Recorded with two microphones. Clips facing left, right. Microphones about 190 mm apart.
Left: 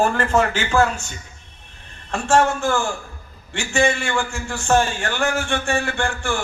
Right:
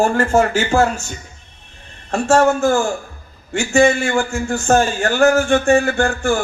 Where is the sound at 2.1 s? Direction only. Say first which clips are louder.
Right 4 dB; 45° right (ahead or behind).